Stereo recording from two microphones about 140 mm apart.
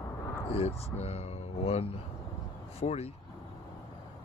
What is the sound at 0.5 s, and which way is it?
Speech, 45° left (ahead or behind).